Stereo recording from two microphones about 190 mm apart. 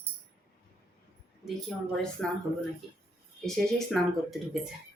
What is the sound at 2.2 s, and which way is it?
Speech, 5° left (ahead or behind).